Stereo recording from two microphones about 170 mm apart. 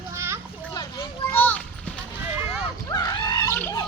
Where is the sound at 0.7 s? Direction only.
25° left (ahead or behind).